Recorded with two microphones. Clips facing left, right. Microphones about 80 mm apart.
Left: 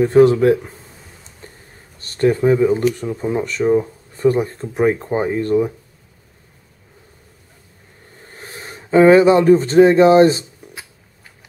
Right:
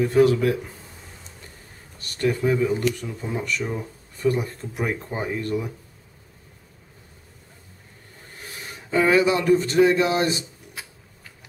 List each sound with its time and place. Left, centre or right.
0.0 s a man's voice: left
1.4 s a sound: left
2.0 s speech: left
8.4 s speech: left
10.6 s music: left